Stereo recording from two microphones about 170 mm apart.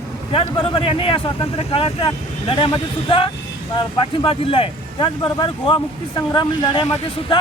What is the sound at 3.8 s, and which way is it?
Speech, 30° left (ahead or behind).